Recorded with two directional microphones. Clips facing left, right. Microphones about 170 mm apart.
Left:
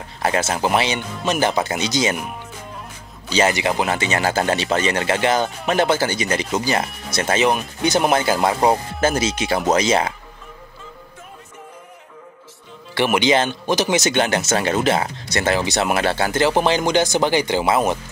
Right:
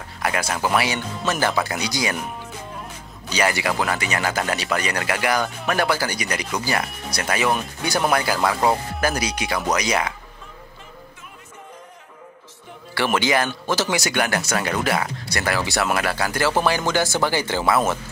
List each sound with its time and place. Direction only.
0.2 s speech: 25° left (ahead or behind)
3.3 s speech: 25° left (ahead or behind)
12.9 s speech: 20° left (ahead or behind)